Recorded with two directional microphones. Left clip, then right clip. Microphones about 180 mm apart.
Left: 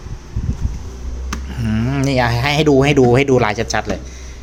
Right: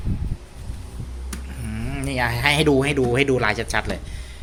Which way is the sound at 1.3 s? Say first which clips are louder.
Left 12 dB; 30° left (ahead or behind).